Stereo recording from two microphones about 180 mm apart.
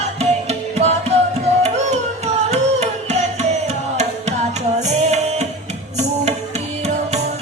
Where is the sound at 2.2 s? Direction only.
35° right (ahead or behind).